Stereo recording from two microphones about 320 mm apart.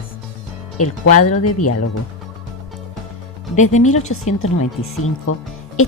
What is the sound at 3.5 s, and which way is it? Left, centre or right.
Speech, left.